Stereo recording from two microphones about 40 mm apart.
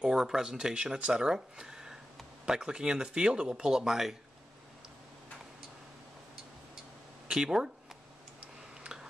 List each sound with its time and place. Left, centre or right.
0.0 s speech: centre
7.2 s speech: centre
8.9 s a sound: centre